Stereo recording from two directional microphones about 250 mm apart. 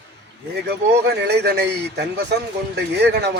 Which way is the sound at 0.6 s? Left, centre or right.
Right.